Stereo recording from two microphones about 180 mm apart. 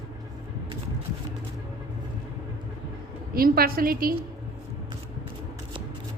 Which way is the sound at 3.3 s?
55° right (ahead or behind).